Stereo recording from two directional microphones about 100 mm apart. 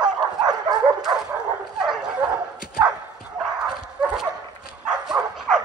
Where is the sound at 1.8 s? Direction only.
5° right (ahead or behind).